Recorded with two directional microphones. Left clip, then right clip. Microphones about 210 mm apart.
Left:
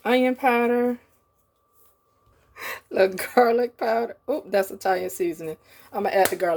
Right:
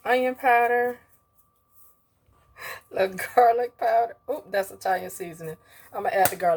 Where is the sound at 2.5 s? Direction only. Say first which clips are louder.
Left 4 dB; 45° left (ahead or behind).